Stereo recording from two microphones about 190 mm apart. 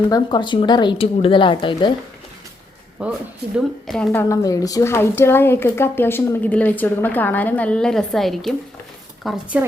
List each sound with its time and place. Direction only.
0.1 s speech: 25° left (ahead or behind)
3.0 s a woman's voice: 5° right (ahead or behind)